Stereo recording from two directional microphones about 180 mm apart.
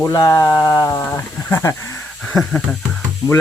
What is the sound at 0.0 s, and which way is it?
Speech, 15° left (ahead or behind).